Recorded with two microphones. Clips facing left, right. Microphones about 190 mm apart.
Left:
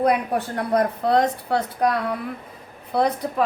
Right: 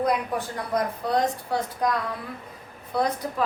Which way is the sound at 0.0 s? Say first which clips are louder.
Left 4 dB; 60° left (ahead or behind).